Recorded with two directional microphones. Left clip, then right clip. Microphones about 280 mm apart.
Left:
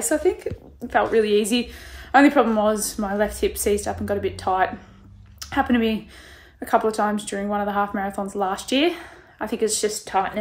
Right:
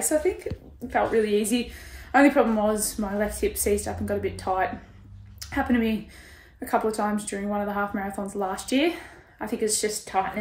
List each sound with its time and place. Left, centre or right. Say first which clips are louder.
0.0 s a woman's voice: left 3 dB; centre